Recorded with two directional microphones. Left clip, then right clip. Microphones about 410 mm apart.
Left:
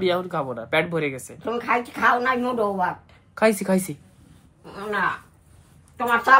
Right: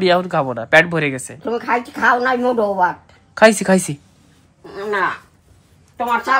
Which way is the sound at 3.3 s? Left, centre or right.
Right.